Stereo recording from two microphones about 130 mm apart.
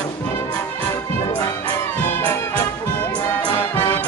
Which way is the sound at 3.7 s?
15° left (ahead or behind).